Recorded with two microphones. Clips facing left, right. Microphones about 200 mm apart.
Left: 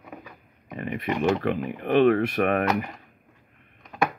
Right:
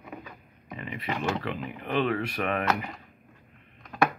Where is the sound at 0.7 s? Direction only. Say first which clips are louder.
Left 6 dB; 55° left (ahead or behind).